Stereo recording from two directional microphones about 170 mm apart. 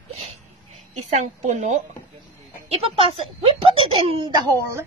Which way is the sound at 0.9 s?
45° right (ahead or behind).